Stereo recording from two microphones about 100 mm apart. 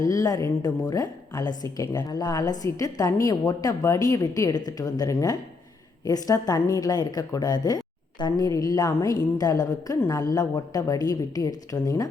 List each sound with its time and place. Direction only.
0.0 s a woman's voice: 35° left (ahead or behind)